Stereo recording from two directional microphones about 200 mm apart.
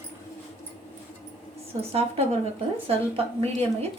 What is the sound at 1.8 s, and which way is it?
A woman's voice, 30° right (ahead or behind).